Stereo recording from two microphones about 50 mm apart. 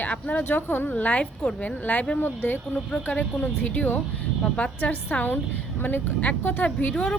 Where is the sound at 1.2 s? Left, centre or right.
Centre.